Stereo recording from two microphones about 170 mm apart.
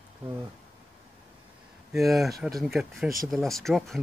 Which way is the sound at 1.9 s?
Centre (ahead or behind).